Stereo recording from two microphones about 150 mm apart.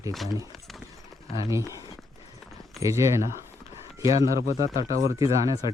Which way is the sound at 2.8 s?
20° right (ahead or behind).